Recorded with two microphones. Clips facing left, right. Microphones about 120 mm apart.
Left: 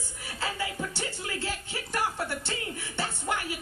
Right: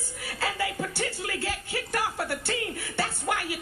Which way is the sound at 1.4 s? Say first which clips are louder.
Right 3 dB; 70° right (ahead or behind).